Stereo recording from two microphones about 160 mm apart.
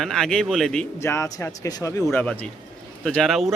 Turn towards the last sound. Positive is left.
turn(degrees=0)  # may be behind; listen again after turning